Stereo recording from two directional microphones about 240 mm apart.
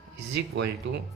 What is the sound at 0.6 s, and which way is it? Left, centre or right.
Speech, right.